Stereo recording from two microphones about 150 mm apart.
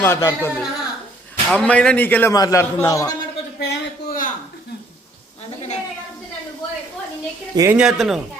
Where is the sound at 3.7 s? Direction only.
70° left (ahead or behind).